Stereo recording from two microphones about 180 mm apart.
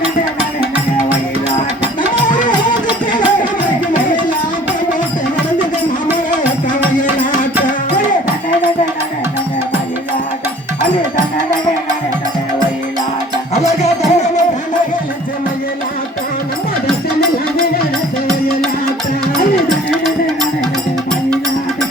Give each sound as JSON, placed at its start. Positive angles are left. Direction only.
{"t": 2.4, "sound": "music", "side_deg": 45}
{"t": 13.5, "sound": "music", "side_deg": 40}